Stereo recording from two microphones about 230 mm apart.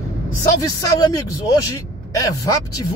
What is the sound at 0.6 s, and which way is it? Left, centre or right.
Speech, centre.